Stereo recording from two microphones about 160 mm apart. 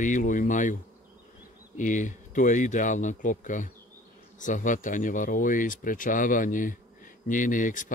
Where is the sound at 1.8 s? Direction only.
50° left (ahead or behind).